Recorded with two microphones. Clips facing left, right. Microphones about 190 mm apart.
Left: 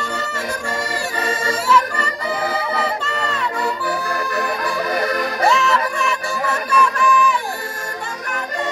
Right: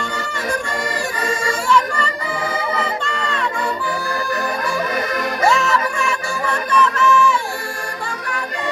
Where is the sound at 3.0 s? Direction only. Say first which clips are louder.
Even; 5° left (ahead or behind).